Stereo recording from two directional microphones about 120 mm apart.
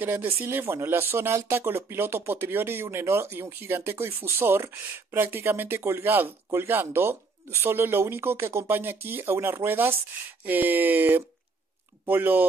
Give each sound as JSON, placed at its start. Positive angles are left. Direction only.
{"t": 0.0, "sound": "speech", "side_deg": -15}